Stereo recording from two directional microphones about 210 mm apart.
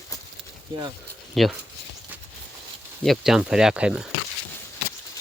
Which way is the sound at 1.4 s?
Centre (ahead or behind).